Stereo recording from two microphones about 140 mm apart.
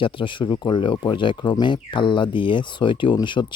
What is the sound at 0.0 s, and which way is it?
Speech, 40° left (ahead or behind).